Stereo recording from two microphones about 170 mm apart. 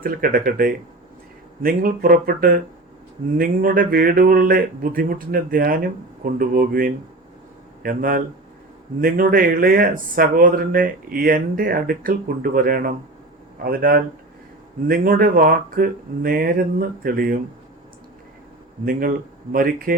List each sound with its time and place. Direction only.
0.0 s speech: 55° right (ahead or behind)
18.9 s speech: 55° right (ahead or behind)